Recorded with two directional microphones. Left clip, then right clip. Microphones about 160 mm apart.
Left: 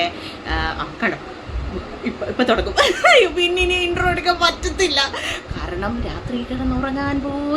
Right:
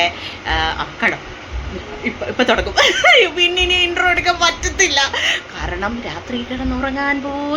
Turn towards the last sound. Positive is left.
turn(degrees=5)  # may be behind; listen again after turning